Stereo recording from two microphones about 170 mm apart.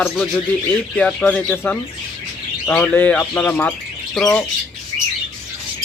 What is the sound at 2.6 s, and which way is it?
Speech, 10° left (ahead or behind).